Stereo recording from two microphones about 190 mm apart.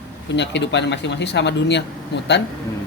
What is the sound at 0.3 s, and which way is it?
Speech, 65° left (ahead or behind).